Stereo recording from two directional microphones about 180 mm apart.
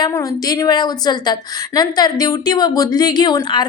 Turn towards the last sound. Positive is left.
turn(degrees=25)  # may be behind; listen again after turning